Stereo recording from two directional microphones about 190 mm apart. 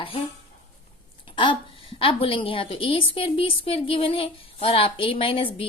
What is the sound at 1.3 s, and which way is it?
A woman's voice, 25° left (ahead or behind).